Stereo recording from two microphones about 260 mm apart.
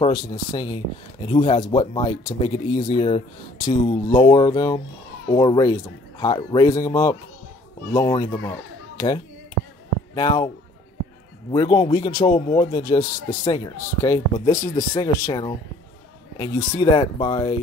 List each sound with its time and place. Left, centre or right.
0.0 s a man's voice: centre
11.5 s a man's voice: centre